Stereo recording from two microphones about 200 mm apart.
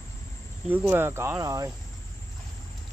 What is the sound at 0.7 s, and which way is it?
Speech, 10° right (ahead or behind).